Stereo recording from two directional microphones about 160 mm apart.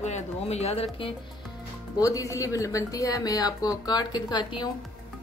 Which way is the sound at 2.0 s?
20° left (ahead or behind).